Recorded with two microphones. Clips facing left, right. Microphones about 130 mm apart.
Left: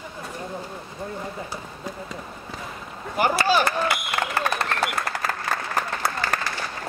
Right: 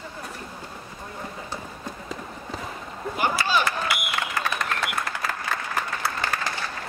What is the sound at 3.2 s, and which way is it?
Speech, 60° left (ahead or behind).